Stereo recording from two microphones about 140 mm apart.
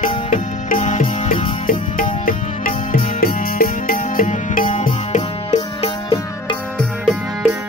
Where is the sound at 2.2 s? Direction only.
80° left; by 4.8 s 65° left (ahead or behind).